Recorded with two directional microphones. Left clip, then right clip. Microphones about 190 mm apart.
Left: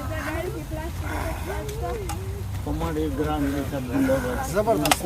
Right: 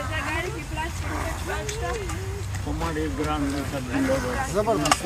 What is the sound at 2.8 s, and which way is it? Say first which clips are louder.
Speech: left 1 dB; 35° left (ahead or behind).